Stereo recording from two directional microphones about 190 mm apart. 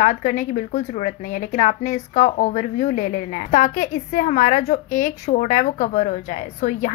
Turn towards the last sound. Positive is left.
turn(degrees=40)  # may be behind; listen again after turning